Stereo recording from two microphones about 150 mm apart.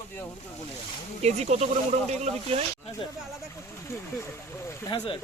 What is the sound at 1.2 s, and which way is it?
Speech, 45° right (ahead or behind).